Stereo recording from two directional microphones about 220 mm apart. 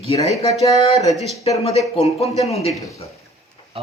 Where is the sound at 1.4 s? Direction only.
30° left (ahead or behind).